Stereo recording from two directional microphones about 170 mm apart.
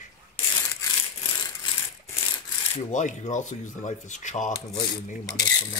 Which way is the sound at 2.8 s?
45° left (ahead or behind).